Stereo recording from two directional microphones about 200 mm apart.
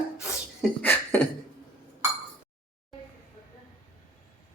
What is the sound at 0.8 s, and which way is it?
Beatboxing, 10° left (ahead or behind).